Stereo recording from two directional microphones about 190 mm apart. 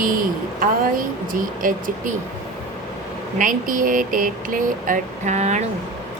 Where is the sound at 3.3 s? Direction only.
45° right (ahead or behind).